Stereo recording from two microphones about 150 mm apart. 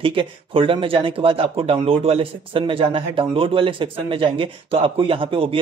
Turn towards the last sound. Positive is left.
turn(degrees=-35)  # may be behind; listen again after turning